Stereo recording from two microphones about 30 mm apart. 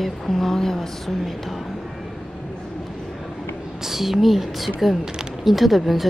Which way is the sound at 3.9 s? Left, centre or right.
Centre.